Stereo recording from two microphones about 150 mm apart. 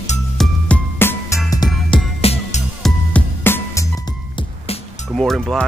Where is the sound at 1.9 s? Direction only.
35° left (ahead or behind).